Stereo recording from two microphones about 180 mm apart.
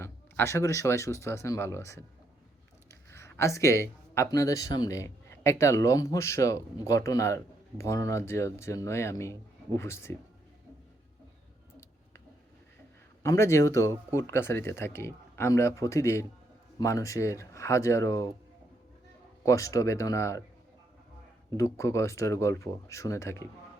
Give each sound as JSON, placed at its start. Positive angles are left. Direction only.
{"t": 0.0, "sound": "speech", "side_deg": 15}
{"t": 13.2, "sound": "speech", "side_deg": 15}
{"t": 19.5, "sound": "speech", "side_deg": 15}
{"t": 21.6, "sound": "speech", "side_deg": 15}